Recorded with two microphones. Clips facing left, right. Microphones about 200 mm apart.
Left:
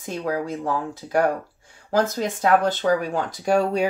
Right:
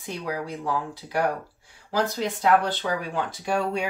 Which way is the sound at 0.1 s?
50° left (ahead or behind).